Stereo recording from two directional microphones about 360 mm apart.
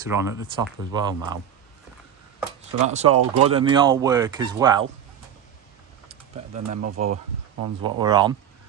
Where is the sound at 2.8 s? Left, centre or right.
Centre.